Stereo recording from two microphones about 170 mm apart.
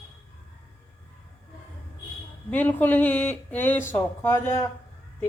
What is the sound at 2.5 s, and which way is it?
A woman's voice, 10° left (ahead or behind).